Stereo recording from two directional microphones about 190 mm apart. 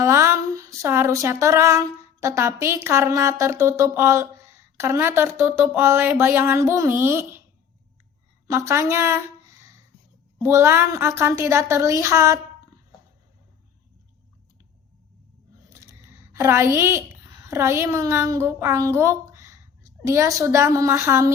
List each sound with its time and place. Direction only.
0.0 s speech: 15° right (ahead or behind)
8.4 s speech: 15° right (ahead or behind)
10.4 s speech: 15° right (ahead or behind)
15.7 s a woman's voice: 15° right (ahead or behind)